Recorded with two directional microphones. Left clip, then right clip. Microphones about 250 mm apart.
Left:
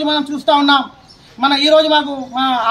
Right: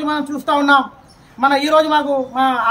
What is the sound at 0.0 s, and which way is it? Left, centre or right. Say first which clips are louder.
A man's voice: left 4 dB; centre.